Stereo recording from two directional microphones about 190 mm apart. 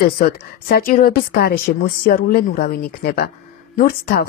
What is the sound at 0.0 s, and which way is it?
Speech, 50° left (ahead or behind).